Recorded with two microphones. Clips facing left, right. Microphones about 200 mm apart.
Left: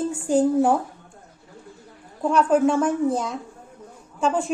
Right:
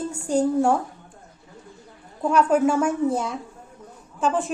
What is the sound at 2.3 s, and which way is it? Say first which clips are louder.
Speech: even; 5° right (ahead or behind).